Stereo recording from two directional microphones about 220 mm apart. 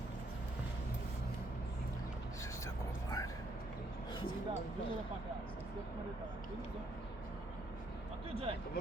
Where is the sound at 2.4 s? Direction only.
15° left (ahead or behind).